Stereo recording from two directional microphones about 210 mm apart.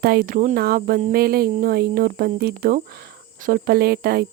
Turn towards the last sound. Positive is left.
turn(degrees=-45)  # may be behind; listen again after turning